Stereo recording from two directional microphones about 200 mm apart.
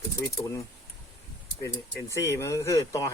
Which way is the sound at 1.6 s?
15° left (ahead or behind).